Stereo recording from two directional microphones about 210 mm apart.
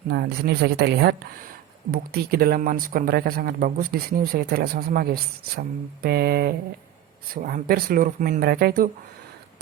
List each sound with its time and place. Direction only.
0.1 s speech: 50° right (ahead or behind)